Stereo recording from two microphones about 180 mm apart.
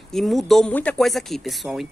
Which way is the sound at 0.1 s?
Centre (ahead or behind).